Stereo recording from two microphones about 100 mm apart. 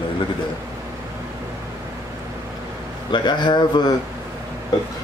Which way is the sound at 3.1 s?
50° left (ahead or behind).